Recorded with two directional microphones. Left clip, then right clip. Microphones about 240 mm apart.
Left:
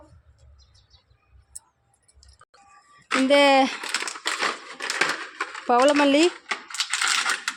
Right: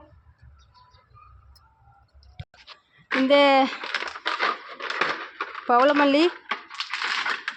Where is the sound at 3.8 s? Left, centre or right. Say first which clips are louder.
Left 1 dB; left.